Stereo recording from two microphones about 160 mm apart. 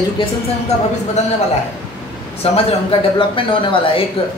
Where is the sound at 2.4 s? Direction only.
40° left (ahead or behind).